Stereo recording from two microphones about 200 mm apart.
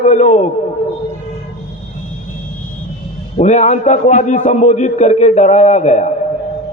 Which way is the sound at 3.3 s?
35° left (ahead or behind).